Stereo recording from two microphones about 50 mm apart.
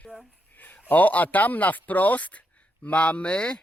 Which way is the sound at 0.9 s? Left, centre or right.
Left.